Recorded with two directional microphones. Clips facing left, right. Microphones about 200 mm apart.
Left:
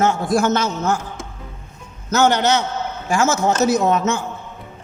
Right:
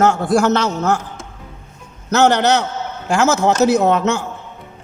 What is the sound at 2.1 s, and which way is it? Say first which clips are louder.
A man's voice: right 2 dB; 70° right (ahead or behind).